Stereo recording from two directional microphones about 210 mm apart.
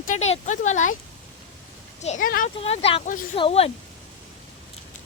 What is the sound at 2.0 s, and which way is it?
Speech, 35° left (ahead or behind).